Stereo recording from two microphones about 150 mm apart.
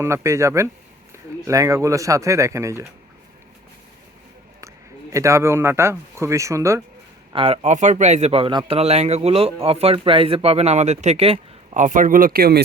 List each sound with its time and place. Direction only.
0.0 s speech: 20° right (ahead or behind)
5.1 s speech: 20° right (ahead or behind)
7.3 s a man's voice: 40° right (ahead or behind); by 12.6 s 85° right